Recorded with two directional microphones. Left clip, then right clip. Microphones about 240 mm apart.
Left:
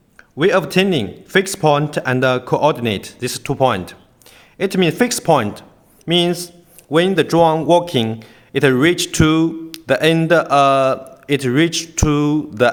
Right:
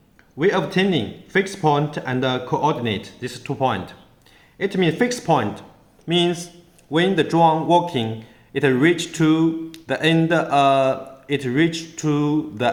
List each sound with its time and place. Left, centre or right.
0.3 s a man's voice: left